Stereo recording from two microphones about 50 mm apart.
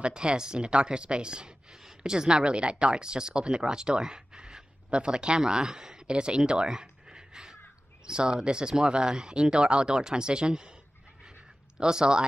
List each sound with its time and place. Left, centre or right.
0.0 s speech: centre
11.8 s speech: centre